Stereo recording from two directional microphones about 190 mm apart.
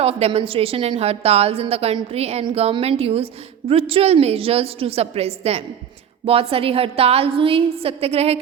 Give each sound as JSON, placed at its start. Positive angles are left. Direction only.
{"t": 0.0, "sound": "a woman's voice", "side_deg": -30}